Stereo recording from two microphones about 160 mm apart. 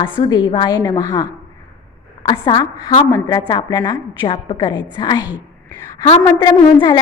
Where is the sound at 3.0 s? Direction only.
20° left (ahead or behind).